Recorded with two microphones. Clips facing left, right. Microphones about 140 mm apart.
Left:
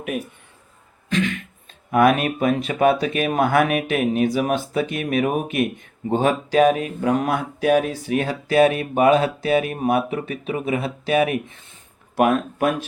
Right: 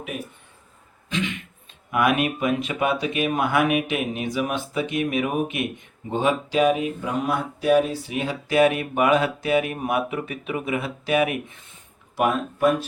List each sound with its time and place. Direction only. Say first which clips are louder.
1.9 s speech: left 4 dB; 40° left (ahead or behind)
7.0 s speech: left 4 dB; 55° left (ahead or behind)
8.4 s speech: left 2 dB; 35° left (ahead or behind)
12.1 s speech: left 4 dB; 60° left (ahead or behind)